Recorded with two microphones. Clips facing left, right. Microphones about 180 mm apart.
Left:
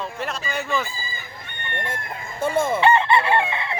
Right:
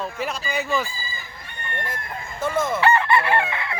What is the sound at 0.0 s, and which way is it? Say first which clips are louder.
Speech: right 1 dB; centre (ahead or behind).